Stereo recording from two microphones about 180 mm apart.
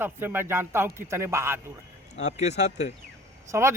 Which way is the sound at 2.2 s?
40° left (ahead or behind).